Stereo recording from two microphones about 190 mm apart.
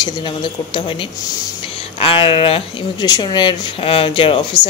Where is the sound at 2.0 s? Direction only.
30° left (ahead or behind).